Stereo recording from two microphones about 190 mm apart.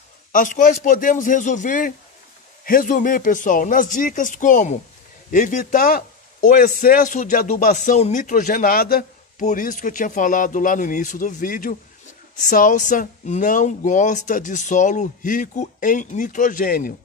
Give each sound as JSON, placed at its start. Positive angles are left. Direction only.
{"t": 0.3, "sound": "speech", "side_deg": 45}
{"t": 9.4, "sound": "speech", "side_deg": 40}